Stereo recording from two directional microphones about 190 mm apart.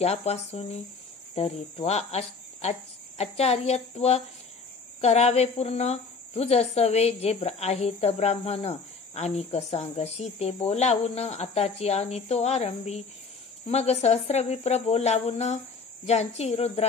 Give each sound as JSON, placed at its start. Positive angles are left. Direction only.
{"t": 0.0, "sound": "a woman's voice", "side_deg": 35}